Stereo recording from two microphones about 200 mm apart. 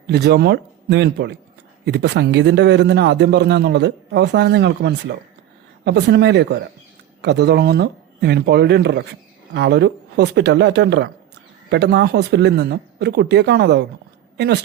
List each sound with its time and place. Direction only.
0.1 s a man's voice: 55° right (ahead or behind)